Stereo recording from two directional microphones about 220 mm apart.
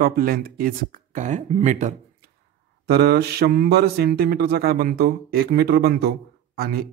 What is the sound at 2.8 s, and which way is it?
Speech, 45° right (ahead or behind).